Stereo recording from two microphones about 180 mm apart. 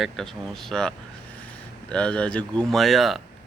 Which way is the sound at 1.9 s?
5° left (ahead or behind).